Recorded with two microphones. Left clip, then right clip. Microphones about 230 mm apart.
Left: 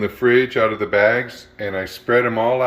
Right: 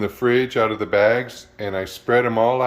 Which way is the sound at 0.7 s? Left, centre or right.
Centre.